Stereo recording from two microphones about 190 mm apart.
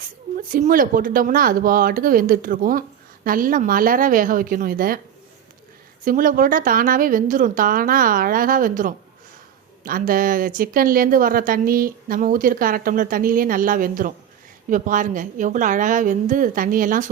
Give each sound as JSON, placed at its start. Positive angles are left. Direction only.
{"t": 0.3, "sound": "speech", "side_deg": -45}
{"t": 6.1, "sound": "speech", "side_deg": -45}